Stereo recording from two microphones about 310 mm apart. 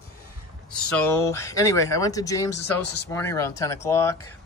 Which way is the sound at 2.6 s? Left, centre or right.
Left.